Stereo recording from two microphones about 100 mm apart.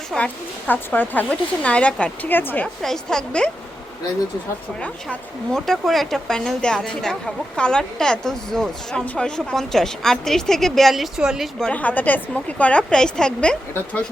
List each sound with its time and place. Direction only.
0.1 s speech: centre (ahead or behind)
0.7 s a woman's voice: 20° left (ahead or behind)
2.8 s speech: 5° left (ahead or behind)
4.8 s speech: 5° left (ahead or behind)
11.6 s a woman's voice: 15° left (ahead or behind)